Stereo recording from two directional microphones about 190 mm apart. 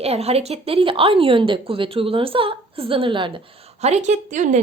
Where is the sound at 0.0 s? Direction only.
30° right (ahead or behind).